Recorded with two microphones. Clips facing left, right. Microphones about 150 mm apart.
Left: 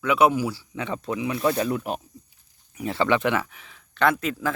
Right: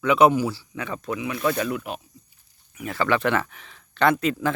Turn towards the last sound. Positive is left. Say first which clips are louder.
# right 2 dB
turn(degrees=0)  # may be behind; listen again after turning